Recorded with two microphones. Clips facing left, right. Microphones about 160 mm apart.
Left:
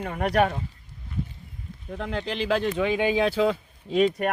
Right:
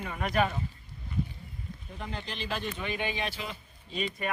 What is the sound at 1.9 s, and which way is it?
Speech, 85° left.